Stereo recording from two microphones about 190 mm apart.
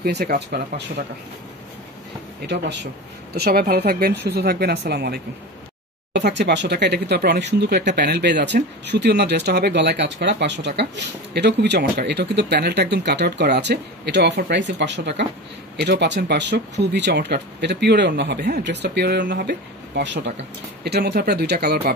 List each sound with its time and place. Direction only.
0.0 s speech: 55° right (ahead or behind)
2.4 s speech: 65° right (ahead or behind)
3.3 s speech: 55° right (ahead or behind)
20.0 s speech: 70° right (ahead or behind)